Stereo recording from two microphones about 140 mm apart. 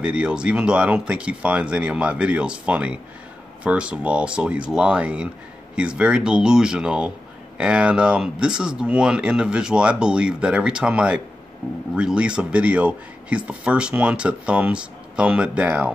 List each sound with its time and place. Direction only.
0.0 s speech: 5° right (ahead or behind)